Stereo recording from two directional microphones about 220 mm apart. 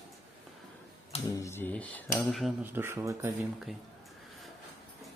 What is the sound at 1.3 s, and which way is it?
A man's voice, 10° left (ahead or behind).